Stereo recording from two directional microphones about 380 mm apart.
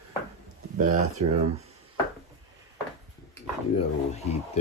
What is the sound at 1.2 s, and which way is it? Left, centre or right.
Speech, right.